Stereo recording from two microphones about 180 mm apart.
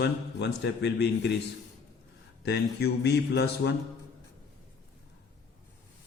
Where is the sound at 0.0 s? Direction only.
70° left (ahead or behind).